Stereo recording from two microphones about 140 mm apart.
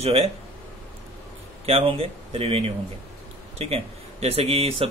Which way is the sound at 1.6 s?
45° right (ahead or behind).